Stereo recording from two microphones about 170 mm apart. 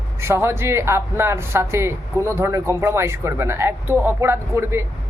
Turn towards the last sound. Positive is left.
turn(degrees=-15)  # may be behind; listen again after turning